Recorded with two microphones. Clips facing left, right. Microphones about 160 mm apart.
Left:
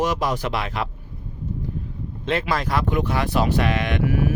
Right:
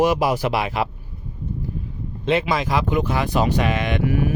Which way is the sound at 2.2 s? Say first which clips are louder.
Right 3 dB; centre (ahead or behind).